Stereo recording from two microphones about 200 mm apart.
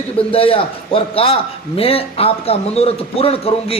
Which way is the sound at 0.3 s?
30° left (ahead or behind).